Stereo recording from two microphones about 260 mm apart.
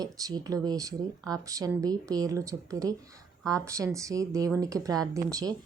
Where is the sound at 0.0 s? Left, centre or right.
Centre.